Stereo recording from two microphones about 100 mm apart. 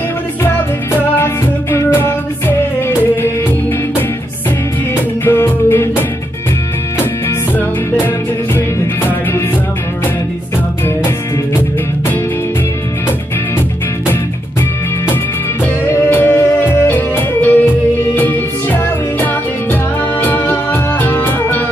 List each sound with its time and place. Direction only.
1.1 s music: 25° left (ahead or behind)
5.2 s music: 20° left (ahead or behind)
7.2 s music: 20° left (ahead or behind)
15.9 s music: 20° left (ahead or behind)